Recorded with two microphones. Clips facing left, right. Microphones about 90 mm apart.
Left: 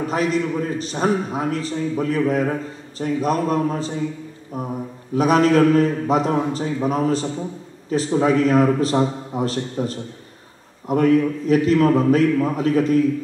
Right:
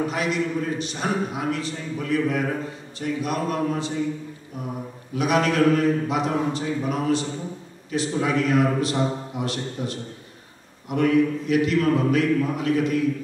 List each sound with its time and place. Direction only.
0.1 s a man's voice: 35° left (ahead or behind)